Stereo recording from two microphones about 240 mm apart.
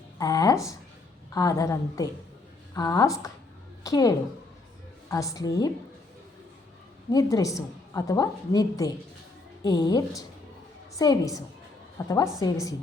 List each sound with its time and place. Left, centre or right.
0.2 s a woman's voice: centre
7.1 s a woman's voice: centre